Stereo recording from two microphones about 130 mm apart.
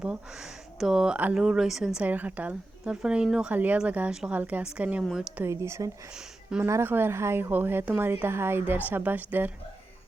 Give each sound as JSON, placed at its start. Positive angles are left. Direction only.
{"t": 0.0, "sound": "a woman's voice", "side_deg": -5}
{"t": 5.4, "sound": "speech", "side_deg": -20}
{"t": 6.1, "sound": "speech", "side_deg": -5}
{"t": 6.7, "sound": "a woman's voice", "side_deg": -20}